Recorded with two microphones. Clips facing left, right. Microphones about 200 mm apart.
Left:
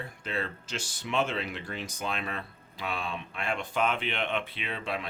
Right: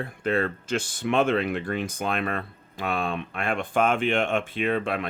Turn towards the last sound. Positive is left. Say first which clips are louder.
# right 9 dB
turn(degrees=-55)  # may be behind; listen again after turning